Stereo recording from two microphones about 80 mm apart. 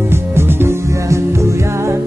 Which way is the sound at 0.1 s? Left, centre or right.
Right.